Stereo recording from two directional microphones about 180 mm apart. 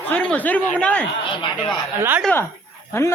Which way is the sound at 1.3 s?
25° left (ahead or behind).